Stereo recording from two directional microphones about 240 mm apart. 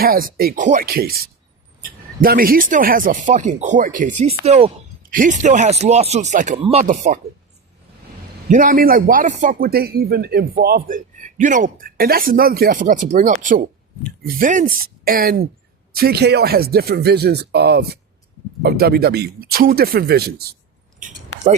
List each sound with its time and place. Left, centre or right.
0.0 s speech: right
8.4 s speech: right